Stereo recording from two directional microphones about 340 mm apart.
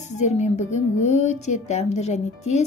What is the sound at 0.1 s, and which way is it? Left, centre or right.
Speech, centre.